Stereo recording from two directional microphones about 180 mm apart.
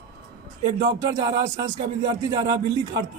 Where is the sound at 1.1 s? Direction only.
20° right (ahead or behind).